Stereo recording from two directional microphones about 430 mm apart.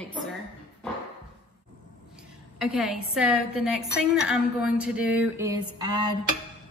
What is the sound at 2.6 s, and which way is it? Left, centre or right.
A woman's voice, centre.